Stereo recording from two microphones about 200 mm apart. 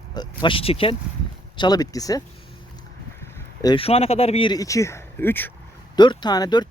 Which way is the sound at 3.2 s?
20° left (ahead or behind).